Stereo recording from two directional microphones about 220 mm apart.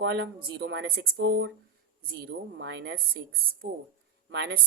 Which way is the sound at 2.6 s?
50° right (ahead or behind).